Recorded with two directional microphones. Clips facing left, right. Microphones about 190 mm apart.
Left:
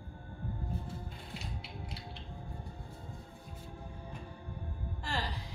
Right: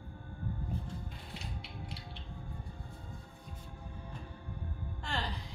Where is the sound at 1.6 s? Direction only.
Centre (ahead or behind).